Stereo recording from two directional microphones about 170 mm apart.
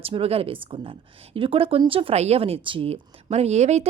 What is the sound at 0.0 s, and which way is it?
A woman's voice, 35° right (ahead or behind).